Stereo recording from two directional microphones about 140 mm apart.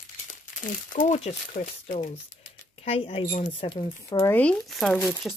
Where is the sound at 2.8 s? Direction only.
45° left (ahead or behind).